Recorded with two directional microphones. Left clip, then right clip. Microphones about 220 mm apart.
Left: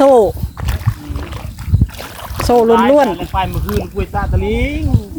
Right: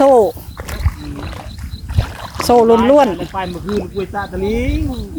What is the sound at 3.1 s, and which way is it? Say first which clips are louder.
Speech: left 3 dB; 35° left (ahead or behind).